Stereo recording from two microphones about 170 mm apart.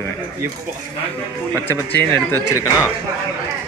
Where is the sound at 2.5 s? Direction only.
20° left (ahead or behind).